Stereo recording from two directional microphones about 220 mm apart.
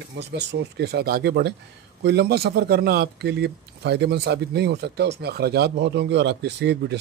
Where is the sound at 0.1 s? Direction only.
50° right (ahead or behind).